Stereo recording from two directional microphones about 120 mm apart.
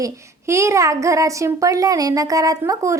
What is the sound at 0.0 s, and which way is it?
A child's voice, 25° right (ahead or behind).